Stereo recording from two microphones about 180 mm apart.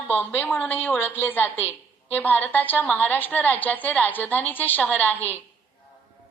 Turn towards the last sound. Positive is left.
turn(degrees=10)  # may be behind; listen again after turning